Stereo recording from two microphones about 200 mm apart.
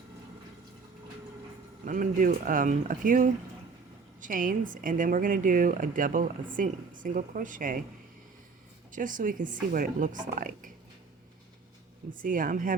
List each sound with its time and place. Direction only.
1.8 s a woman's voice: 40° right (ahead or behind)
8.9 s a woman's voice: 40° right (ahead or behind)
12.1 s a woman's voice: 45° right (ahead or behind)